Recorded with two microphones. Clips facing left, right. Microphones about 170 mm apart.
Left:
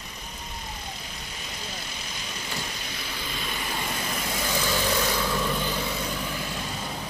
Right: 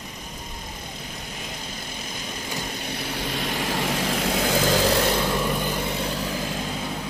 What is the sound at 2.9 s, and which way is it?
Vehicle, 65° right (ahead or behind).